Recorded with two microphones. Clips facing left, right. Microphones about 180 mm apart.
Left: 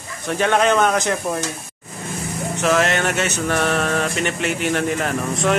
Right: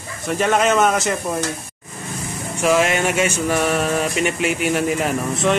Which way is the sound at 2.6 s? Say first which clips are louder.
Right 2 dB; 10° right (ahead or behind).